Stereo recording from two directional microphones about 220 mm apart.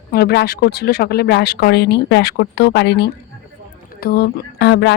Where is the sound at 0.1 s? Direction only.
45° left (ahead or behind).